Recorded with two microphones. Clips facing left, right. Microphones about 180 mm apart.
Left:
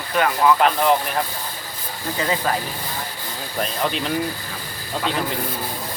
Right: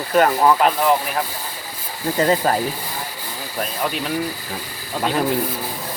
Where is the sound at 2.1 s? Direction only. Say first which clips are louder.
Right 5 dB; 40° right (ahead or behind).